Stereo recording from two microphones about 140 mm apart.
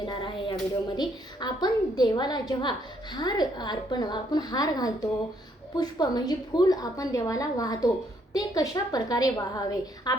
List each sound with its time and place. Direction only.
0.0 s hands: 35° left (ahead or behind)
0.9 s a woman's voice: 30° left (ahead or behind)